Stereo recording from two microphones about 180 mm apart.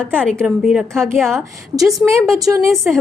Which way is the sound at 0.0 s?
5° left (ahead or behind).